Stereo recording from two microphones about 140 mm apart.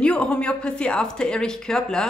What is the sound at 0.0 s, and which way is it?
Speech, 10° left (ahead or behind).